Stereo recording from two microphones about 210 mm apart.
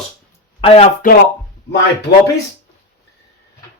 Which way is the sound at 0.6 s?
25° left (ahead or behind).